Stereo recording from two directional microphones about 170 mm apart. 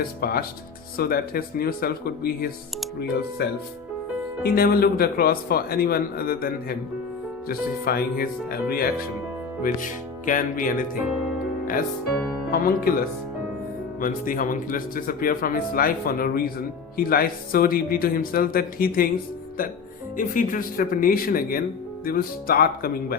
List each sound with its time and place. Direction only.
0.0 s speech: 60° left (ahead or behind)
4.4 s speech: 60° left (ahead or behind)
9.6 s speech: 50° left (ahead or behind)
12.5 s speech: 60° left (ahead or behind)
14.0 s speech: 55° left (ahead or behind)
20.1 s speech: 50° left (ahead or behind)